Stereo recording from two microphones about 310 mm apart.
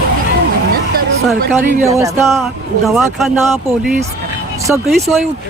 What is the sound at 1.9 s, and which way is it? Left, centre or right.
Speech, centre.